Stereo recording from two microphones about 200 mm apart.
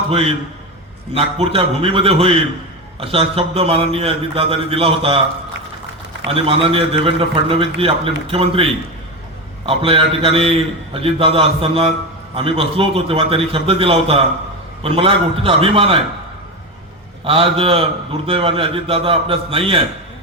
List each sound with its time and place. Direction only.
0.1 s a man's voice: 30° right (ahead or behind)
6.2 s a man's voice: 25° right (ahead or behind)
17.2 s a man's voice: 30° right (ahead or behind)